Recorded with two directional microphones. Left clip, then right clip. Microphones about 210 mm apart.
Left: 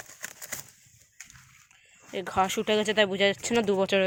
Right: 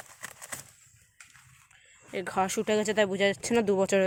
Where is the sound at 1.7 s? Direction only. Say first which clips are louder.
Even; centre (ahead or behind).